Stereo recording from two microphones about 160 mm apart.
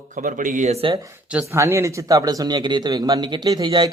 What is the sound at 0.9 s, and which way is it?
A man's voice, 20° right (ahead or behind).